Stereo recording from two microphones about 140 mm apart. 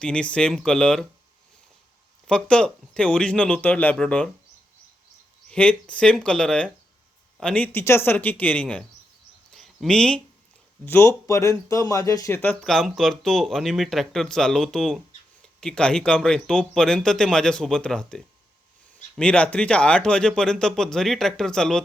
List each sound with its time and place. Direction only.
0.0 s speech: 5° left (ahead or behind)
2.2 s speech: 5° left (ahead or behind)
5.5 s speech: 5° left (ahead or behind)
9.5 s a sound: 5° left (ahead or behind)
10.8 s speech: 15° left (ahead or behind)